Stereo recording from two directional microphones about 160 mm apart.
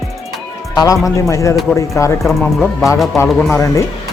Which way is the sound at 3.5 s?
20° left (ahead or behind).